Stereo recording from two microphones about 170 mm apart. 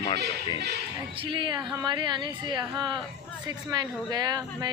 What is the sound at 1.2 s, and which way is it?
Speech, 30° right (ahead or behind).